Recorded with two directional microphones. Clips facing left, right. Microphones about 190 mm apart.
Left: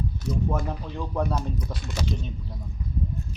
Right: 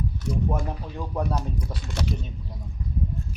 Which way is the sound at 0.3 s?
10° right (ahead or behind).